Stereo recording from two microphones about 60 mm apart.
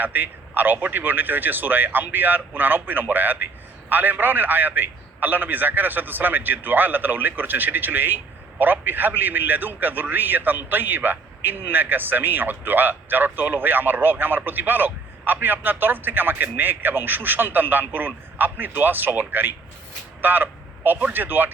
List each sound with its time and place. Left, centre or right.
0.0 s a man's voice: right
20.2 s a sound: right
21.1 s a man's voice: right